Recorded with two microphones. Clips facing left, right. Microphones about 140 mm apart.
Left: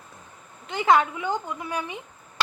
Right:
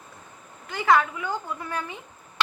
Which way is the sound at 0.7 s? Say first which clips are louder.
Left 1 dB; 20° left (ahead or behind).